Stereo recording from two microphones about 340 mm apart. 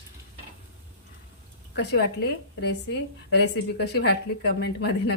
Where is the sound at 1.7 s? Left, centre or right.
Left.